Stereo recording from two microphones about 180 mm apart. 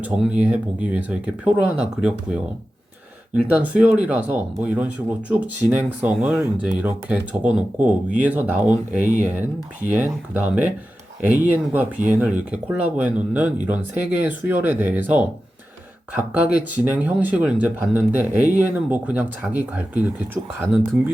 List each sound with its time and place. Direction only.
0.0 s speech: 5° right (ahead or behind)
3.5 s speech: 10° right (ahead or behind)